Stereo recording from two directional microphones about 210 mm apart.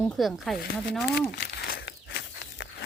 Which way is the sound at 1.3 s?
50° left (ahead or behind).